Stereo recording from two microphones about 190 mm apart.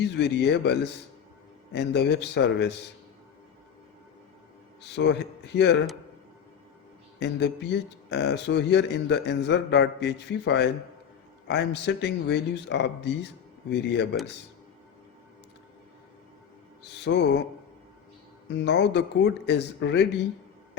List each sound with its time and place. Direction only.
0.0 s speech: 65° left (ahead or behind)
4.8 s speech: 65° left (ahead or behind)
7.2 s speech: 60° left (ahead or behind)
17.0 s speech: 65° left (ahead or behind)
18.4 s speech: 65° left (ahead or behind)